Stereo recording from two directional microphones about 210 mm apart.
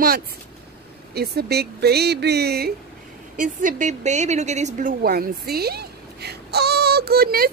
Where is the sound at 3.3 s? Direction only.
35° right (ahead or behind).